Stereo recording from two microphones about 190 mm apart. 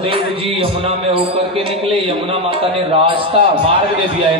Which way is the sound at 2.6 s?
30° right (ahead or behind).